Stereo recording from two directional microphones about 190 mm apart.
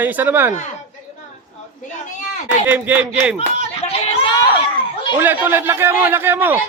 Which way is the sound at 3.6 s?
35° left (ahead or behind).